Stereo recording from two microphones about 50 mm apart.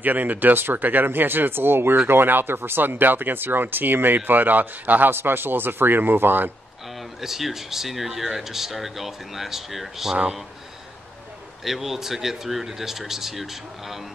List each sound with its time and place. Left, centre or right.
0.0 s speech: right
7.2 s speech: centre
11.6 s speech: centre